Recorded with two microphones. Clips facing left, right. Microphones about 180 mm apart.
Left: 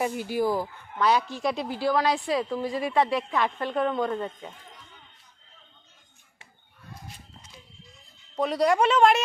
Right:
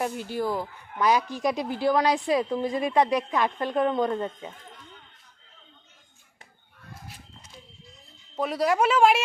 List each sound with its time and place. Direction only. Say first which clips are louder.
0.0 s speech: left 2 dB; 5° left (ahead or behind)
0.9 s speech: even; 15° right (ahead or behind)
8.4 s speech: left 1 dB; 5° right (ahead or behind)